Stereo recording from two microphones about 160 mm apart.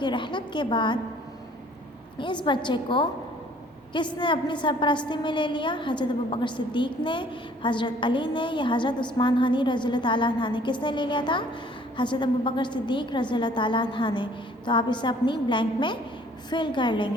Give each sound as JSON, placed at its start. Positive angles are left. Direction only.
{"t": 0.0, "sound": "a woman's voice", "side_deg": 30}
{"t": 2.1, "sound": "a woman's voice", "side_deg": 30}